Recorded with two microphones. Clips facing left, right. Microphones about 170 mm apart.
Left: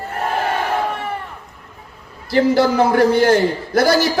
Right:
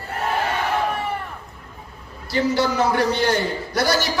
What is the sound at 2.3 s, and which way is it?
A man's voice, 50° left (ahead or behind).